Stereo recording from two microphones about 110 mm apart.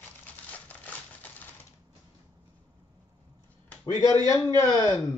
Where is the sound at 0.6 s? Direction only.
15° left (ahead or behind).